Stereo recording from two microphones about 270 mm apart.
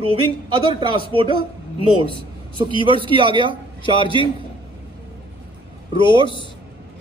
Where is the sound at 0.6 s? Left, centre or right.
Centre.